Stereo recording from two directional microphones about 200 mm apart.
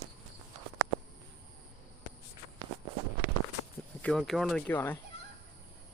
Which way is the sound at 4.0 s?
5° left (ahead or behind).